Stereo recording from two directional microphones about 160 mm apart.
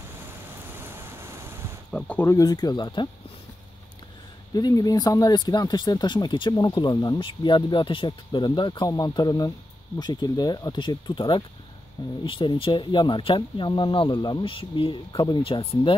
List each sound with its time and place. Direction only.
0.7 s vehicle: 15° right (ahead or behind)
1.9 s speech: 10° left (ahead or behind); by 3.1 s 30° left (ahead or behind)
4.6 s speech: 25° left (ahead or behind)